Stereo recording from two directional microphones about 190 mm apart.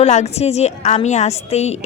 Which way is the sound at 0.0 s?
35° left (ahead or behind).